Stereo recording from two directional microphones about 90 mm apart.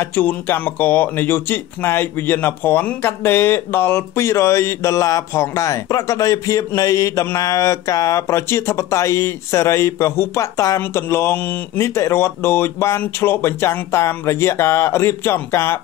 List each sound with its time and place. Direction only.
0.1 s speech: 20° left (ahead or behind)